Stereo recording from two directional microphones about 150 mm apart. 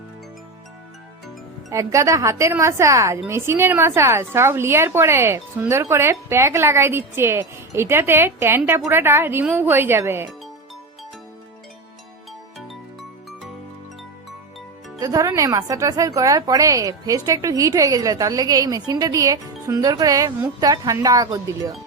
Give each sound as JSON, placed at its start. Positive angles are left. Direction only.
{"t": 1.7, "sound": "a woman's voice", "side_deg": -20}
{"t": 15.0, "sound": "a woman's voice", "side_deg": -25}